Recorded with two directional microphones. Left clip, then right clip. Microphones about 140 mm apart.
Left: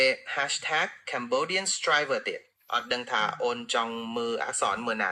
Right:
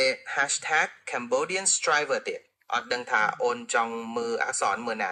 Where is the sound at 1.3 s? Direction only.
Centre (ahead or behind).